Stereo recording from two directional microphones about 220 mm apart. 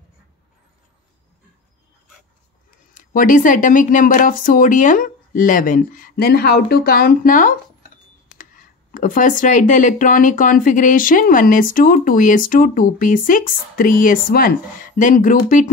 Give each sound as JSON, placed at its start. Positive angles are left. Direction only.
{"t": 2.9, "sound": "speech", "side_deg": 35}
{"t": 8.9, "sound": "speech", "side_deg": 35}